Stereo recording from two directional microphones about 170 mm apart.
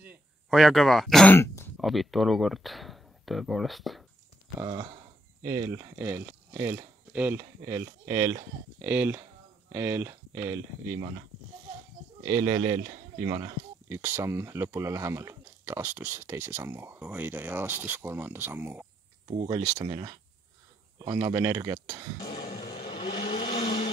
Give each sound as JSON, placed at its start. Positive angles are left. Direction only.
{"t": 0.0, "sound": "speech", "side_deg": 0}
{"t": 1.8, "sound": "speech", "side_deg": 0}
{"t": 4.6, "sound": "speech", "side_deg": -20}
{"t": 12.3, "sound": "speech", "side_deg": -15}
{"t": 13.8, "sound": "speech", "side_deg": -15}
{"t": 19.2, "sound": "speech", "side_deg": -30}
{"t": 22.6, "sound": "vehicle", "side_deg": 35}